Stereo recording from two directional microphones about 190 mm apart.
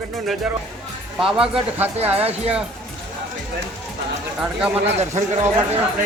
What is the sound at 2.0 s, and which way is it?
Speech, 30° right (ahead or behind).